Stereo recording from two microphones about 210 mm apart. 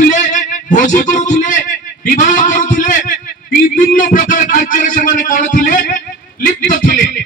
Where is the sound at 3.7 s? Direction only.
40° left (ahead or behind).